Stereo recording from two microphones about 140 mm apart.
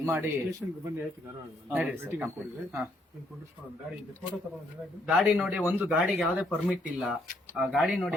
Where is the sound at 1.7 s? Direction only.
10° right (ahead or behind).